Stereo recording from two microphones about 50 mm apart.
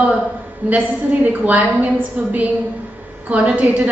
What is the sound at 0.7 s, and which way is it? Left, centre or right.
A woman's voice, right.